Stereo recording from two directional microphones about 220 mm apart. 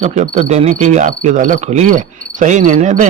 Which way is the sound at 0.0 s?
30° right (ahead or behind).